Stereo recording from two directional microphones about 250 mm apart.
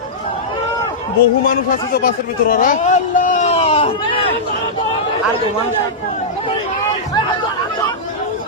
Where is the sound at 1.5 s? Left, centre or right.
Left.